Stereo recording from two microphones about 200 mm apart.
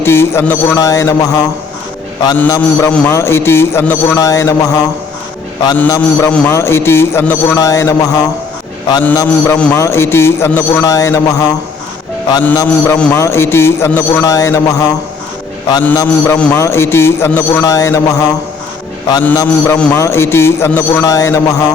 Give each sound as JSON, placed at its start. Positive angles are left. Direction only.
{"t": 0.0, "sound": "a man's voice", "side_deg": 10}